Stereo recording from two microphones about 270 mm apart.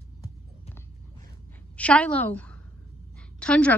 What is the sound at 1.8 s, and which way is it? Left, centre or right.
A woman's voice, centre.